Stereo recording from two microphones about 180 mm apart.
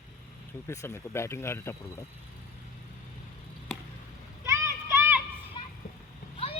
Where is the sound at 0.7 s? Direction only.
15° left (ahead or behind).